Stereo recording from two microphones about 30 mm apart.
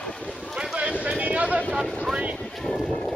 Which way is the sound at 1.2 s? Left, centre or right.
Right.